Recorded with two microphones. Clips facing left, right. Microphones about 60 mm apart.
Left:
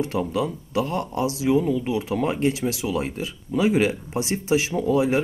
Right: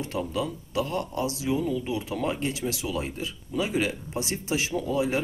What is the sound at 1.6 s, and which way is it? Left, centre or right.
Speech, left.